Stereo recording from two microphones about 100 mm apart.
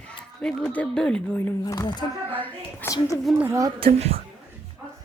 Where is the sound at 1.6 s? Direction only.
35° left (ahead or behind).